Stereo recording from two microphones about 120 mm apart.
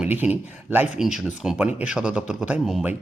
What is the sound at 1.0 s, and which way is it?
Speech, 5° right (ahead or behind).